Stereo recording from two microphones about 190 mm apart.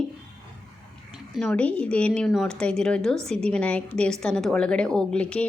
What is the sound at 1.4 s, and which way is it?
A woman's voice, 5° left (ahead or behind).